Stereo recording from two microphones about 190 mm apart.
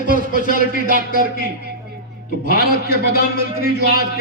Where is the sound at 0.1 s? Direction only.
45° left (ahead or behind).